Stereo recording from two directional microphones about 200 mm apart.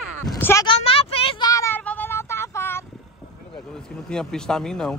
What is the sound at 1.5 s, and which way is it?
Child singing, 10° left (ahead or behind).